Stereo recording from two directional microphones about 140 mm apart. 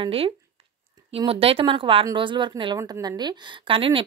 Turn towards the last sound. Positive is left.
turn(degrees=-40)  # may be behind; listen again after turning